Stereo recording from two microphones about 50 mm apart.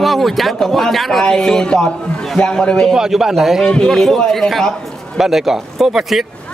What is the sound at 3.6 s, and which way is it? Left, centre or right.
A man's voice, centre.